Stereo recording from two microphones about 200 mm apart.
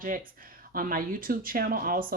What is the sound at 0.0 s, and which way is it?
Speech, 45° right (ahead or behind).